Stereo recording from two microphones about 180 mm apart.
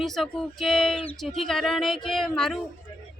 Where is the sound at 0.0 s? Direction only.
Centre (ahead or behind).